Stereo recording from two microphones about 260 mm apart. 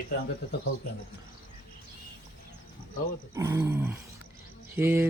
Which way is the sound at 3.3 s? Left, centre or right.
Centre.